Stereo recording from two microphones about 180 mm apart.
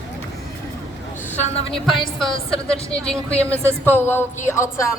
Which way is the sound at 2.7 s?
5° left (ahead or behind).